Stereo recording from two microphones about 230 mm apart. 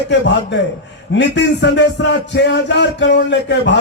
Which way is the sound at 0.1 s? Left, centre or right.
Left.